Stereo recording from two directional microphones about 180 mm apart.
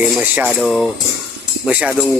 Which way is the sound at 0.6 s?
Centre (ahead or behind).